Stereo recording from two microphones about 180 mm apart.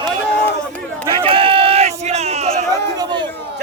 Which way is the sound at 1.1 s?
30° right (ahead or behind).